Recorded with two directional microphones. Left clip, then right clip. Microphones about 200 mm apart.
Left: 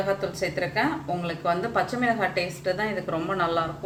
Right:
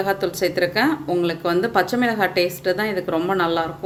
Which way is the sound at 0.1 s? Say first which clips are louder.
Right 6 dB; 55° right (ahead or behind).